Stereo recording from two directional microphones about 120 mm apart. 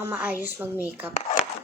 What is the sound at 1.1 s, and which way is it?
Speech, 60° left (ahead or behind).